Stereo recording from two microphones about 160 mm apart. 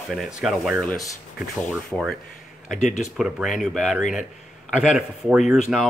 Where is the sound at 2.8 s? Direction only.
50° left (ahead or behind).